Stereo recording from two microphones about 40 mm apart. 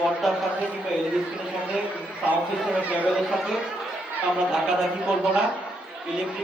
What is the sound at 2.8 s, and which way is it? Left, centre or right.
Speech, right.